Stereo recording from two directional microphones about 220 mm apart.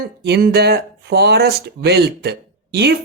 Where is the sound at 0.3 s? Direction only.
45° right (ahead or behind).